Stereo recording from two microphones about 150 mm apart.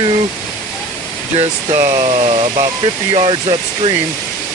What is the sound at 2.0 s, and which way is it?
Speech, 35° right (ahead or behind).